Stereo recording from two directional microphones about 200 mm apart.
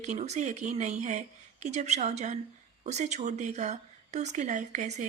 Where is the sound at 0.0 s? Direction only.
35° right (ahead or behind).